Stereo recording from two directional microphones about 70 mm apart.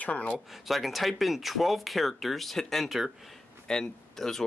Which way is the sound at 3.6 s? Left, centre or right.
Centre.